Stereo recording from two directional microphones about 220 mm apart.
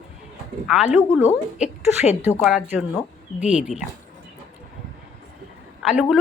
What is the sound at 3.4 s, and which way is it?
Speech, 30° left (ahead or behind).